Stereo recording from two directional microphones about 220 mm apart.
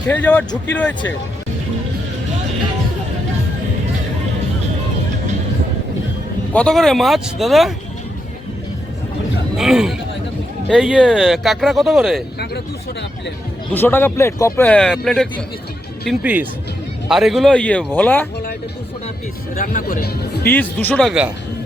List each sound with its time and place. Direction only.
0.1 s speech: 5° left (ahead or behind)
6.5 s speech: 5° left (ahead or behind)
9.6 s speech: centre (ahead or behind)
12.4 s speech: 50° left (ahead or behind)
13.7 s speech: 10° left (ahead or behind)
16.0 s speech: 5° right (ahead or behind)
19.5 s speech: 40° left (ahead or behind)
20.5 s speech: 10° left (ahead or behind)